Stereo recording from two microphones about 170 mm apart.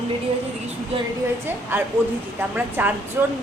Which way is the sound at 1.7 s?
10° right (ahead or behind).